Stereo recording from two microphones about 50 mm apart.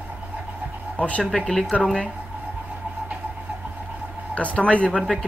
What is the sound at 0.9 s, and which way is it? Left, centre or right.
Speech, left.